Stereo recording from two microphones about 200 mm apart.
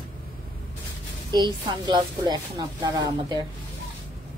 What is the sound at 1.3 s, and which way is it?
A woman's voice, 20° right (ahead or behind).